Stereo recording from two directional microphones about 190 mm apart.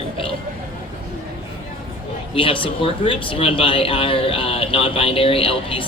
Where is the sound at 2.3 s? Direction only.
30° left (ahead or behind).